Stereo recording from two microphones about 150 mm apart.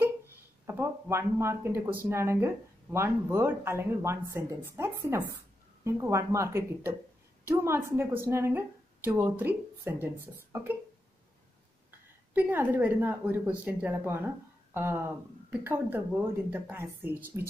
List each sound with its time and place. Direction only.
0.7 s a woman's voice: 15° right (ahead or behind)
12.4 s speech: 10° right (ahead or behind)